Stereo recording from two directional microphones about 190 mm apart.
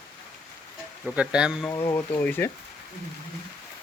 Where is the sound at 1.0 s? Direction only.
5° right (ahead or behind).